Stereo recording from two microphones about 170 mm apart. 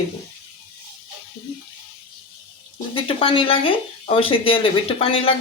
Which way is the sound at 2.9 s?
35° left (ahead or behind).